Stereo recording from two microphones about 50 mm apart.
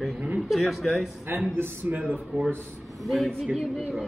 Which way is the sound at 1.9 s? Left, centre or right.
Right.